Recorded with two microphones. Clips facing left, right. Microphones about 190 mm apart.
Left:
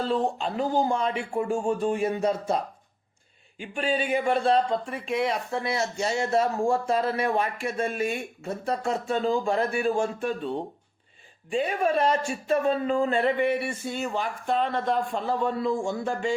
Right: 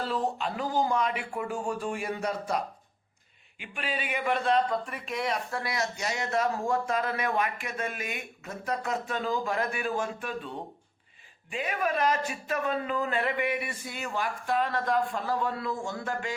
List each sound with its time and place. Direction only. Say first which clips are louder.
0.1 s speech: left 4 dB; 30° left (ahead or behind)
3.6 s speech: left 8 dB; 30° left (ahead or behind)